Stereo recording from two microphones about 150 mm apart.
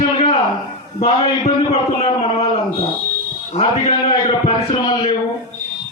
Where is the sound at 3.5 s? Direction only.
40° left (ahead or behind).